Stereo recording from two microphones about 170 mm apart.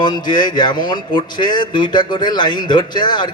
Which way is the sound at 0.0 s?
25° left (ahead or behind).